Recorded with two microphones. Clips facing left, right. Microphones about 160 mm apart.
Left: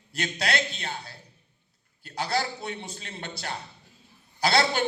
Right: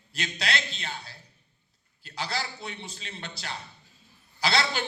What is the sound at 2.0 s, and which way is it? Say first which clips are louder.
A man's voice: left 5 dB; 50° left (ahead or behind).